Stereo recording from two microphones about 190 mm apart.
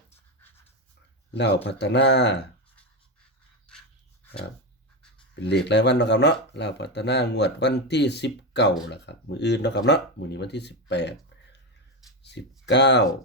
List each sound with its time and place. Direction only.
0.4 s a sound: 10° left (ahead or behind)
1.3 s speech: 65° left (ahead or behind)
5.4 s speech: 65° left (ahead or behind)
12.2 s speech: 65° left (ahead or behind)